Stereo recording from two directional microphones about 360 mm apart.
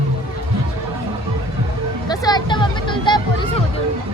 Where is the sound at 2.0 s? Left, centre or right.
Centre.